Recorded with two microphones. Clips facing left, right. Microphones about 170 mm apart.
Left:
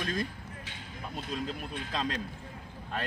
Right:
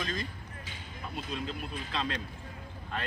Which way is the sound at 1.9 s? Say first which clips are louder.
Left 1 dB; 40° left (ahead or behind).